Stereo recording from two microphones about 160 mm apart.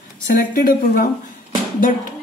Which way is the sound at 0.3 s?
70° left (ahead or behind).